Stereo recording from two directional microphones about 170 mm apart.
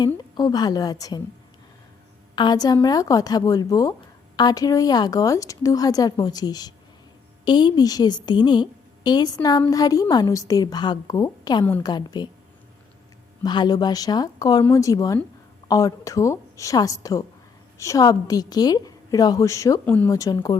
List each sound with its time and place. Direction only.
0.2 s a woman's voice: 25° left (ahead or behind)
2.3 s a woman's voice: 25° left (ahead or behind)
13.4 s a woman's voice: 25° left (ahead or behind)
20.1 s a woman's voice: 20° left (ahead or behind)